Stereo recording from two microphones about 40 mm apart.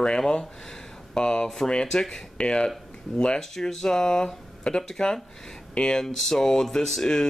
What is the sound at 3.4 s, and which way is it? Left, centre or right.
Speech, centre.